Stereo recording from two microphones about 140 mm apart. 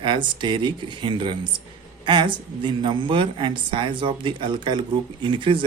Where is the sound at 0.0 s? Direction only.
35° right (ahead or behind).